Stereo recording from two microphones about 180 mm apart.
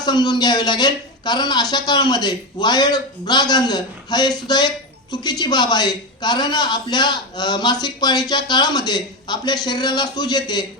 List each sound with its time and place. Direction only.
0.0 s a man's voice: 20° left (ahead or behind)